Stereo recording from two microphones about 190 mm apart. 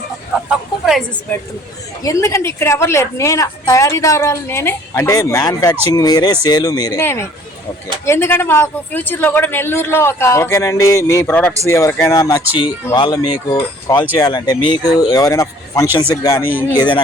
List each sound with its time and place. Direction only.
0.4 s a sound: centre (ahead or behind)
2.0 s a woman's voice: 15° left (ahead or behind)
16.4 s speech: 50° left (ahead or behind)
16.7 s speech: 25° left (ahead or behind)